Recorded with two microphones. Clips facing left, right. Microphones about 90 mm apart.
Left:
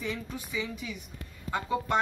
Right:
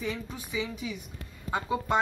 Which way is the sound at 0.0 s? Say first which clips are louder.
Right 1 dB; 15° right (ahead or behind).